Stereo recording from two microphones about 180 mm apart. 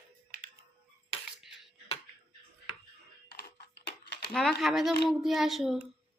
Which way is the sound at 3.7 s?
70° left (ahead or behind).